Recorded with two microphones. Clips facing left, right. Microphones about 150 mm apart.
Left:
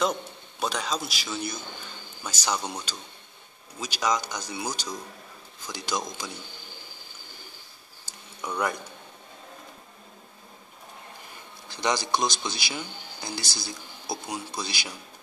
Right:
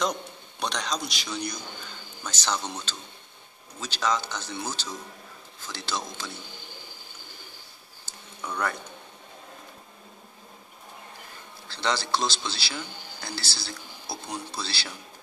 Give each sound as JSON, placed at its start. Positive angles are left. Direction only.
{"t": 0.0, "sound": "a man's voice", "side_deg": 5}
{"t": 8.0, "sound": "a sound", "side_deg": 10}
{"t": 11.6, "sound": "speech", "side_deg": 15}